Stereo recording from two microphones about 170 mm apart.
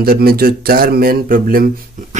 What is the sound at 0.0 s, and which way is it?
Speech, 60° right (ahead or behind).